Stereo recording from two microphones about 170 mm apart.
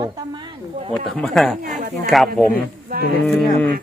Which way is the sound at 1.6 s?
50° right (ahead or behind).